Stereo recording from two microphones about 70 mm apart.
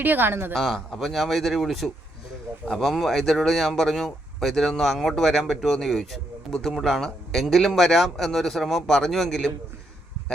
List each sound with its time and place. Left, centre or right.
0.0 s speech: right
0.5 s speech: centre